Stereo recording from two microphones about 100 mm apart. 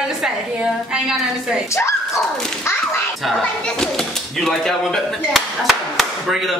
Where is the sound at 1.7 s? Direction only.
30° left (ahead or behind).